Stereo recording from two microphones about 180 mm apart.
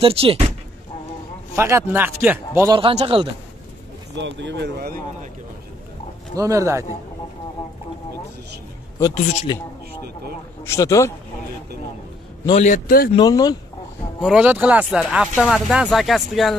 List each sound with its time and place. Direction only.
0.0 s speech: 30° right (ahead or behind)
1.5 s speech: 15° right (ahead or behind)
2.7 s speech: 30° right (ahead or behind)
4.1 s speech: 85° right; by 5.3 s 55° right (ahead or behind)
6.3 s speech: 15° right (ahead or behind)
9.1 s speech: 40° left (ahead or behind)
10.6 s speech: 15° left (ahead or behind)
12.6 s speech: 50° left (ahead or behind)
13.1 s speech: 20° left (ahead or behind)
14.2 s speech: 5° right (ahead or behind)